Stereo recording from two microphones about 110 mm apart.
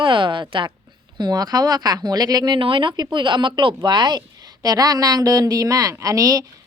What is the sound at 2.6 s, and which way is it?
A woman's voice, 50° right (ahead or behind).